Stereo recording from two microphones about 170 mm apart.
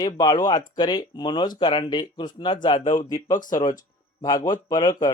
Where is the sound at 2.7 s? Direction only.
45° left (ahead or behind).